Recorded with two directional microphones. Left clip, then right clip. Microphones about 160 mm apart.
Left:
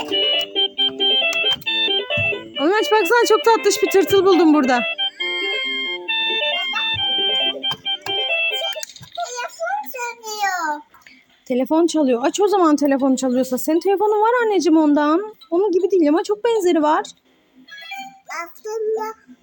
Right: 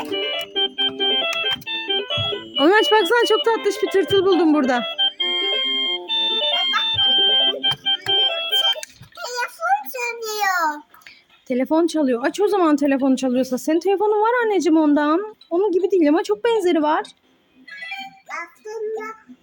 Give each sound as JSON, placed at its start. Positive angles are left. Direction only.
{"t": 0.0, "sound": "organ", "side_deg": -5}
{"t": 1.6, "sound": "organ", "side_deg": -40}
{"t": 1.9, "sound": "organ", "side_deg": 5}
{"t": 2.3, "sound": "speech", "side_deg": -15}
{"t": 4.9, "sound": "music", "side_deg": -10}
{"t": 6.8, "sound": "organ", "side_deg": -10}
{"t": 9.2, "sound": "a sound", "side_deg": -70}
{"t": 11.4, "sound": "speech", "side_deg": 5}
{"t": 17.7, "sound": "music", "side_deg": 0}
{"t": 18.3, "sound": "child singing", "side_deg": 45}